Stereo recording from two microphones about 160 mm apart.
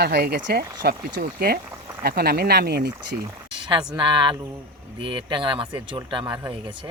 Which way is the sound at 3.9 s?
30° right (ahead or behind).